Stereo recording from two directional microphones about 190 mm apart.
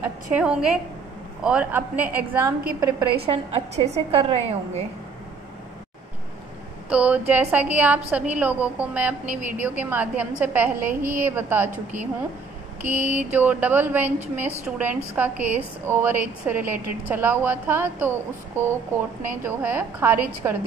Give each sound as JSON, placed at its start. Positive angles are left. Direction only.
{"t": 0.3, "sound": "a woman's voice", "side_deg": -5}
{"t": 3.3, "sound": "a woman's voice", "side_deg": -35}
{"t": 6.9, "sound": "a woman's voice", "side_deg": -5}